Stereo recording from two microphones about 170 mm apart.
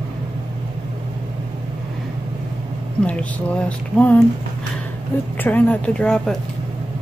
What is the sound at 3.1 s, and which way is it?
Speech, 10° left (ahead or behind).